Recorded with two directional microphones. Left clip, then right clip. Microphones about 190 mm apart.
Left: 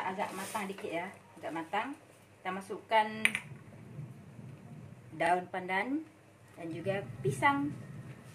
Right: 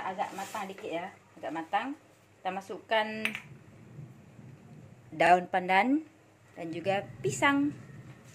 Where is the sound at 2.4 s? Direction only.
40° right (ahead or behind).